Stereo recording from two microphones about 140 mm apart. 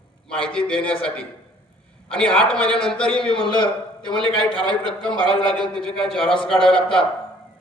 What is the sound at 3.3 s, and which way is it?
Speech, 40° left (ahead or behind).